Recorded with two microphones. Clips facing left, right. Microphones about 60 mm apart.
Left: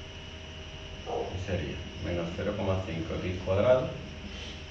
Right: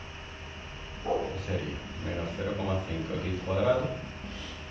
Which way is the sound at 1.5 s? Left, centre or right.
Centre.